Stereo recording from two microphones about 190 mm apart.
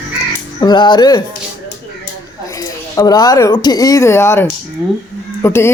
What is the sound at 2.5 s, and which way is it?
Speech, 20° left (ahead or behind).